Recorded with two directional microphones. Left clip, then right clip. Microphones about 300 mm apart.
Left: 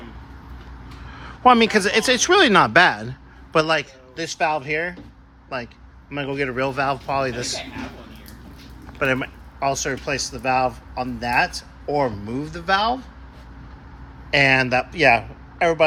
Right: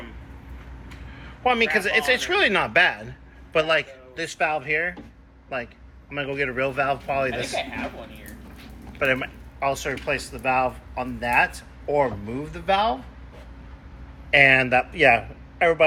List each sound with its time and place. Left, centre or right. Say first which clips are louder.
1.5 s speech: left 5 dB; left
9.2 s speech: left 2 dB; centre
14.3 s a man's voice: right 1 dB; centre